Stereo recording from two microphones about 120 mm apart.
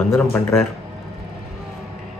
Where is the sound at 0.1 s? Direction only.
20° left (ahead or behind).